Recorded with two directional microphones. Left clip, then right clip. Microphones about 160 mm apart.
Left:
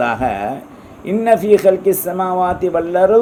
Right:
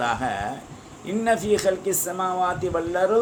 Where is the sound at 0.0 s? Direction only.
50° left (ahead or behind).